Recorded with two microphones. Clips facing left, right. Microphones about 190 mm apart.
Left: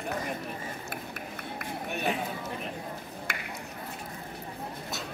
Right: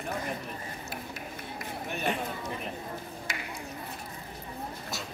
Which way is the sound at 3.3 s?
60° left (ahead or behind).